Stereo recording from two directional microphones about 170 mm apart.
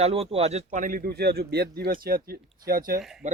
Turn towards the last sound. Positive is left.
turn(degrees=0)  # may be behind; listen again after turning